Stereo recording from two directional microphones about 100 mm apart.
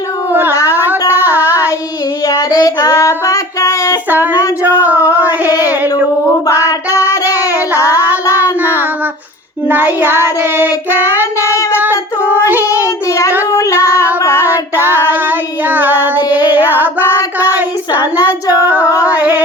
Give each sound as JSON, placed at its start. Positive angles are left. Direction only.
{"t": 0.7, "sound": "a sound", "side_deg": -20}
{"t": 2.2, "sound": "child singing", "side_deg": 40}
{"t": 3.0, "sound": "music", "side_deg": 30}
{"t": 4.6, "sound": "a sound", "side_deg": -15}
{"t": 6.5, "sound": "child singing", "side_deg": 30}
{"t": 10.0, "sound": "child singing", "side_deg": -20}
{"t": 12.7, "sound": "child singing", "side_deg": 35}
{"t": 13.5, "sound": "female singing", "side_deg": 30}
{"t": 14.3, "sound": "child singing", "side_deg": -20}
{"t": 18.4, "sound": "female singing", "side_deg": 35}
{"t": 19.0, "sound": "singing", "side_deg": -15}